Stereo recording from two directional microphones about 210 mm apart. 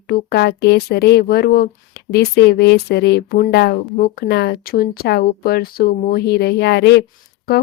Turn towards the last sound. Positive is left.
turn(degrees=50)  # may be behind; listen again after turning